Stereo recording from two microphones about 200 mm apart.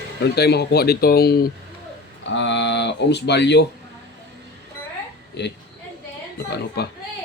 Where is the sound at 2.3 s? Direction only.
65° left (ahead or behind).